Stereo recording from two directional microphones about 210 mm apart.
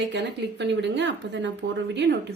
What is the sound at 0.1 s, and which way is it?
Speech, 55° right (ahead or behind).